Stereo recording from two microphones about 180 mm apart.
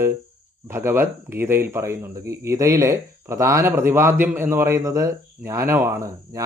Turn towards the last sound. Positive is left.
turn(degrees=-15)  # may be behind; listen again after turning